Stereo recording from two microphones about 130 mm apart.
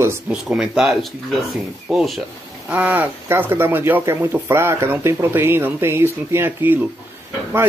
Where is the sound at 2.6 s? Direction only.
10° right (ahead or behind).